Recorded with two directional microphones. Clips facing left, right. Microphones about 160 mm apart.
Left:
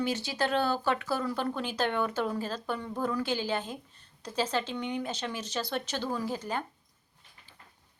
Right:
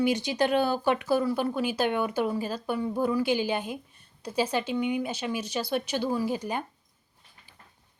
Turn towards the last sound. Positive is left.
turn(degrees=-15)  # may be behind; listen again after turning